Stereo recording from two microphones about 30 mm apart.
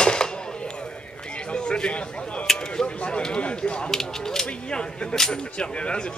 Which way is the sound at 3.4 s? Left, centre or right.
Left.